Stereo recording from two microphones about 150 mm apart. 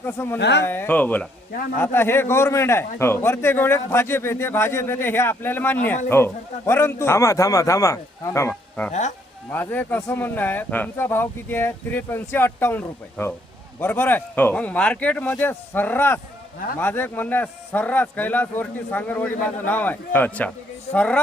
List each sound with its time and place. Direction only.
0.0 s a man's voice: 15° left (ahead or behind)
8.9 s speech: 55° left (ahead or behind)
9.5 s a man's voice: 10° left (ahead or behind)